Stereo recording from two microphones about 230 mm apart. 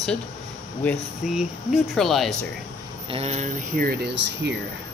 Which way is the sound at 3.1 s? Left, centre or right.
Right.